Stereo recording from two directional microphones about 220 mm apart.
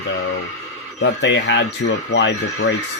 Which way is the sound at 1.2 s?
50° left (ahead or behind).